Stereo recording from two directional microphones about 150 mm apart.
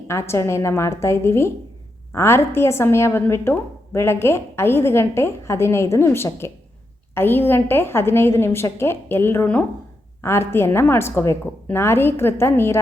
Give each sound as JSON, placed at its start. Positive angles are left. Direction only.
{"t": 0.1, "sound": "a woman's voice", "side_deg": 15}